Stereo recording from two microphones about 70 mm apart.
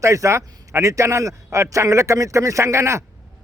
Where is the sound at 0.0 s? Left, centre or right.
Right.